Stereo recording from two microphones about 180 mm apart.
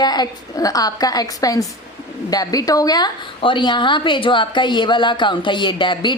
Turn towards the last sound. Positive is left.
turn(degrees=25)  # may be behind; listen again after turning